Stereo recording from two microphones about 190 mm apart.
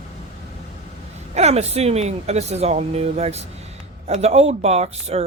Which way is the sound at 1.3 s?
35° right (ahead or behind).